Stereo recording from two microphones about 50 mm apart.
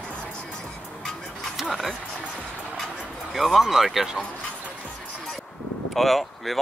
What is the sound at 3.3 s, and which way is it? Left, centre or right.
Speech, centre.